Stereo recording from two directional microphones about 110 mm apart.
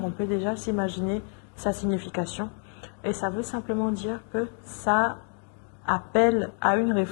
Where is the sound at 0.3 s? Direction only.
15° left (ahead or behind).